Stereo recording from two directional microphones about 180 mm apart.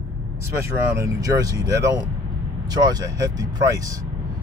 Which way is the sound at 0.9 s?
20° right (ahead or behind).